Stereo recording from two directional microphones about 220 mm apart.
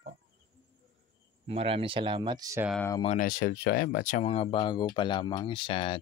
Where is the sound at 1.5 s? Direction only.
25° right (ahead or behind).